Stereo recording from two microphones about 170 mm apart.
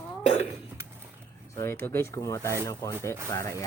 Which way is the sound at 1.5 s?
15° left (ahead or behind).